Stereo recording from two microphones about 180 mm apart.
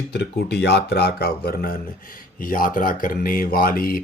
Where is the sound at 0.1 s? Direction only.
75° left (ahead or behind).